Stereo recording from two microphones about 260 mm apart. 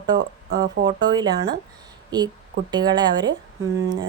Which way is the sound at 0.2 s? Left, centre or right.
Right.